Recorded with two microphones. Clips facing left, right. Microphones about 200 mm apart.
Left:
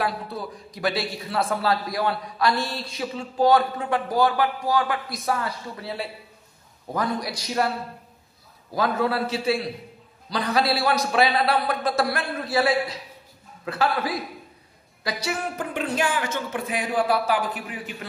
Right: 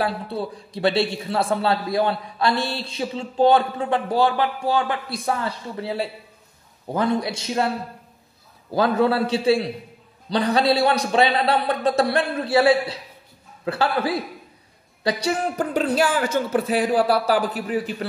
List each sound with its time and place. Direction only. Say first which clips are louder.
0.0 s a man's voice: right 3 dB; 30° right (ahead or behind)
7.2 s a man's voice: right 2 dB; 25° right (ahead or behind)
8.7 s a man's voice: right 5 dB; 30° right (ahead or behind)